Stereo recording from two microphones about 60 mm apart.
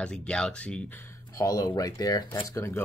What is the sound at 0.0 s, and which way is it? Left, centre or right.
Speech, centre.